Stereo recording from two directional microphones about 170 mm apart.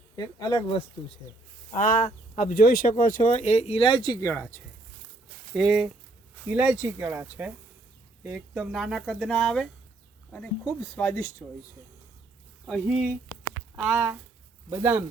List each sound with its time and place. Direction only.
0.2 s speech: 25° left (ahead or behind)
1.7 s speech: 50° left (ahead or behind); by 4.3 s 25° left (ahead or behind)
4.3 s speech: 15° left (ahead or behind)
5.5 s speech: centre (ahead or behind)
10.9 s speech: 15° left (ahead or behind)
12.6 s speech: centre (ahead or behind)